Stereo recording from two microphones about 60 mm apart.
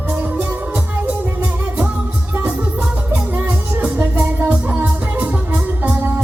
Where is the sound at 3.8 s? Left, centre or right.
Right.